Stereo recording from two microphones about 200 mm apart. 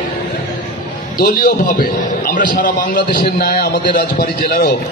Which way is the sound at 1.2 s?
45° left (ahead or behind).